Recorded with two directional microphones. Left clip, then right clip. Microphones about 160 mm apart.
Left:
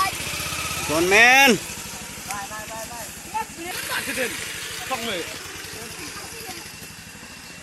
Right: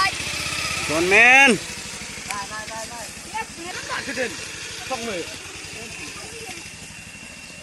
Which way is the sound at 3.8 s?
30° right (ahead or behind).